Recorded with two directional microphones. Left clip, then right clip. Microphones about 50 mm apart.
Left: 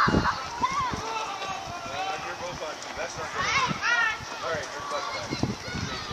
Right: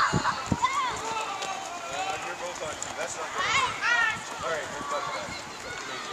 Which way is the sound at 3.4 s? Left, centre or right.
Right.